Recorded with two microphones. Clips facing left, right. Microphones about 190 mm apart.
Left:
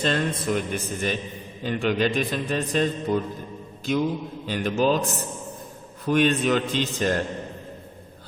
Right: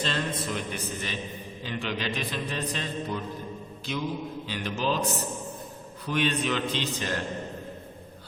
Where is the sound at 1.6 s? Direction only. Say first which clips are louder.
Left 9 dB; 50° left (ahead or behind).